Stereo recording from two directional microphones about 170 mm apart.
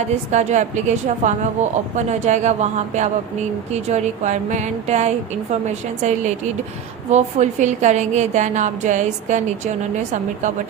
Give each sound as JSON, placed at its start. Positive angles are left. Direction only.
{"t": 0.1, "sound": "a woman's voice", "side_deg": -40}